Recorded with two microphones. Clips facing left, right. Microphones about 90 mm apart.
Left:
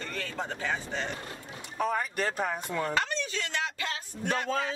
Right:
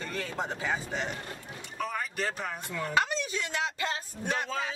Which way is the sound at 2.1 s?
40° left (ahead or behind).